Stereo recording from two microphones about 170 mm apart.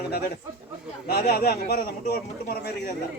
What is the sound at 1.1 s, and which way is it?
Speech, 65° left (ahead or behind).